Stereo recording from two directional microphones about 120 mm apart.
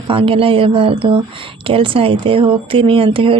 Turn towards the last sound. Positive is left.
turn(degrees=-50)  # may be behind; listen again after turning